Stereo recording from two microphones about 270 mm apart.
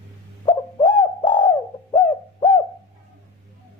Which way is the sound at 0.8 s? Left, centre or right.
Centre.